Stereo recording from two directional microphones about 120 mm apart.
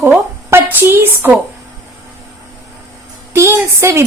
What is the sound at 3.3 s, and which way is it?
Speech, 20° right (ahead or behind).